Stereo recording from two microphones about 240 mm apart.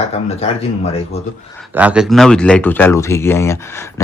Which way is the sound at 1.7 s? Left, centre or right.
Centre.